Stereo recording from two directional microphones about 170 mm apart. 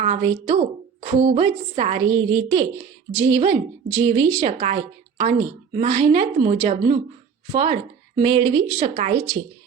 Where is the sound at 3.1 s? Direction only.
10° right (ahead or behind).